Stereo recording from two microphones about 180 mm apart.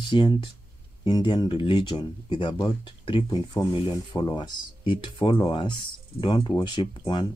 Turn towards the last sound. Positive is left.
turn(degrees=25)  # may be behind; listen again after turning